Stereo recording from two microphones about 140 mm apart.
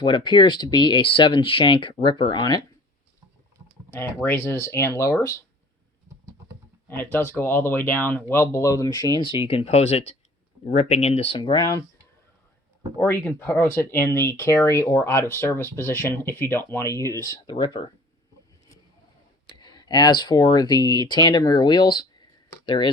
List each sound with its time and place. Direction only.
0.0 s speech: 35° left (ahead or behind)
3.9 s speech: 15° left (ahead or behind)
6.8 s speech: 15° left (ahead or behind)
9.2 s speech: 40° left (ahead or behind)
11.3 s speech: 35° left (ahead or behind)
13.0 s speech: 15° left (ahead or behind); by 17.8 s 35° left (ahead or behind)
19.5 s speech: 30° left (ahead or behind)